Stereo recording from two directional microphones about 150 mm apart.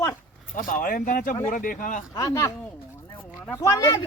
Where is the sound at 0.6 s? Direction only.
65° left (ahead or behind).